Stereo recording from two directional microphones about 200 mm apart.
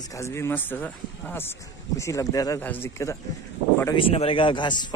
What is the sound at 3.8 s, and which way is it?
Speech, 25° left (ahead or behind).